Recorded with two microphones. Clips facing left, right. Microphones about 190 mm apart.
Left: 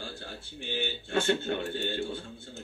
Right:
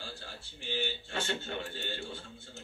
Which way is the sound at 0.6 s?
55° left (ahead or behind).